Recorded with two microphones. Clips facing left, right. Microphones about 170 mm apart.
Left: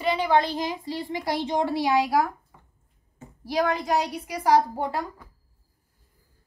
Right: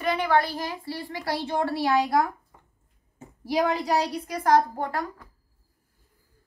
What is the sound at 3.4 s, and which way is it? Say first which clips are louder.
A woman's voice: right 1 dB; 10° right (ahead or behind).